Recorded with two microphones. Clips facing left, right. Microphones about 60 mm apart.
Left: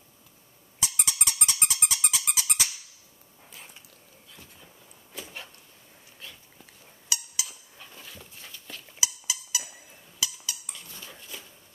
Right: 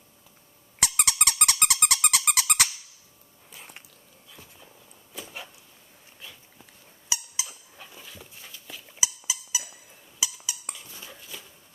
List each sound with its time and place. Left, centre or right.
0.7 s dog: right
4.3 s a sound: centre
7.1 s squeak: right
7.7 s dog: centre
9.0 s a sound: centre
10.4 s squeak: centre